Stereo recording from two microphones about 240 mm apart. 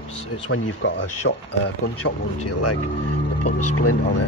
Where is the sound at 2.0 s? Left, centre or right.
Left.